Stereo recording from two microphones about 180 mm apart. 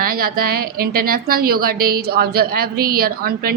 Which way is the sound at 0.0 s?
55° right (ahead or behind).